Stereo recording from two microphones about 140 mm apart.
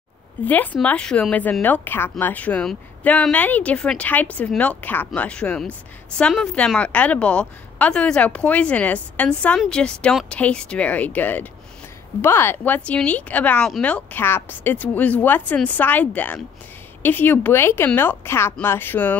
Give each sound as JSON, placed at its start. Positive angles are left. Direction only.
{"t": 0.8, "sound": "speech", "side_deg": 5}